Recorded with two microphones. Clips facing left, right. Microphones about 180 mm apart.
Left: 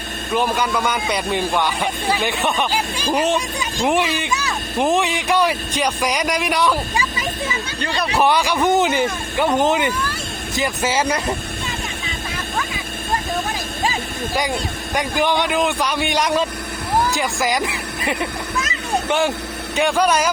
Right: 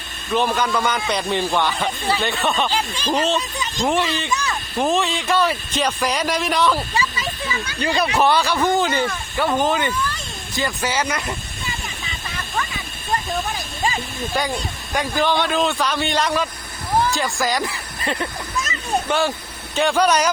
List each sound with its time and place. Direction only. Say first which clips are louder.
0.3 s speech: even; 10° left (ahead or behind); by 11.3 s 30° left (ahead or behind)
14.9 s speech: left 1 dB; 15° left (ahead or behind)
17.4 s speech: left 2 dB; 20° left (ahead or behind)